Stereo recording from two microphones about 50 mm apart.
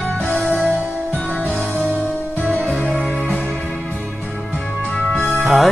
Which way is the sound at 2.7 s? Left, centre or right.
Left.